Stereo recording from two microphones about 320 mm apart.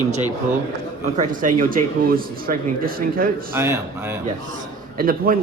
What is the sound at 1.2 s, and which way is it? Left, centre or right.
Speech, right.